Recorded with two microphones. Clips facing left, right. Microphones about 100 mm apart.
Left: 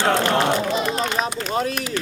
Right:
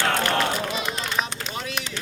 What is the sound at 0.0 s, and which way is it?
Run, 25° left (ahead or behind).